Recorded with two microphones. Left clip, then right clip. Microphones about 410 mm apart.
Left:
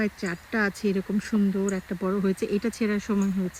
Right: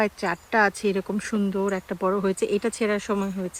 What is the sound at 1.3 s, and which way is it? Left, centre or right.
Speech, right.